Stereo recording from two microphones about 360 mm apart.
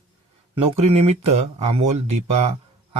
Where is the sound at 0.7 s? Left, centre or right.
Centre.